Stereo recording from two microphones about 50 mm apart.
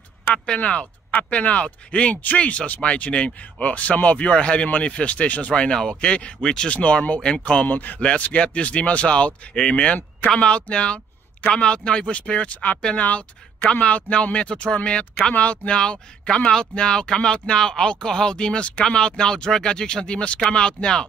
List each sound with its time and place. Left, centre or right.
0.3 s speech: left
5.5 s speech: centre
7.6 s speech: left
8.0 s speech: left